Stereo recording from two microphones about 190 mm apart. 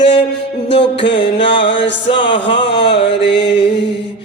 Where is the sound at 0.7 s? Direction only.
65° left (ahead or behind).